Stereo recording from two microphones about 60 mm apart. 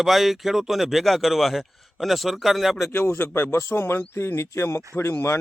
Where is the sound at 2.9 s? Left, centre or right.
Left.